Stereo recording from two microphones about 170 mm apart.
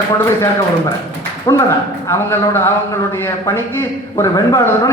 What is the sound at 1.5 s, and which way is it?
A man's voice, 20° left (ahead or behind).